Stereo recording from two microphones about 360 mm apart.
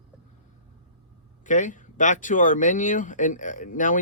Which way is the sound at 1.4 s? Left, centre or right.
Left.